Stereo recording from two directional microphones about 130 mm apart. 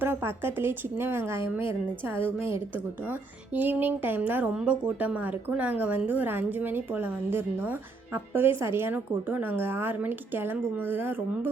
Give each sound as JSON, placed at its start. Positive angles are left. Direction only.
{"t": 0.0, "sound": "a woman's voice", "side_deg": -15}